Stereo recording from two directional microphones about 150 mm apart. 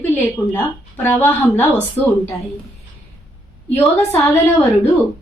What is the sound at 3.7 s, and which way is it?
Speech, 15° left (ahead or behind).